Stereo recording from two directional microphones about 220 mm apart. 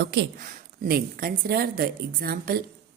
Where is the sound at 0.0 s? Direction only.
50° right (ahead or behind).